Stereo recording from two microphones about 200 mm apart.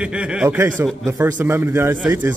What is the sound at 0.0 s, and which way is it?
A man's voice, 5° right (ahead or behind).